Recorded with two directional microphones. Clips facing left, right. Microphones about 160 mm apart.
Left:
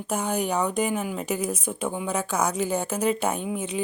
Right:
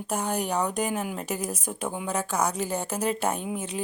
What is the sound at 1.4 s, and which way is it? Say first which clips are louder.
Speech: left 4 dB; 35° right (ahead or behind).